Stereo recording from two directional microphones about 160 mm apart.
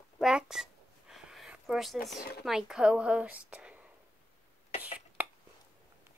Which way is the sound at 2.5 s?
5° right (ahead or behind).